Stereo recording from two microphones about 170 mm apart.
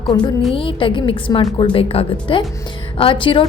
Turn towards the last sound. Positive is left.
turn(degrees=30)  # may be behind; listen again after turning